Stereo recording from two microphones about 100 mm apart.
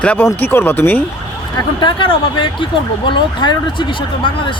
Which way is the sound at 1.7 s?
55° left (ahead or behind).